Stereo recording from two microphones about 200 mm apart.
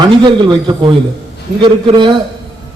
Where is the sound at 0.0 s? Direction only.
20° right (ahead or behind).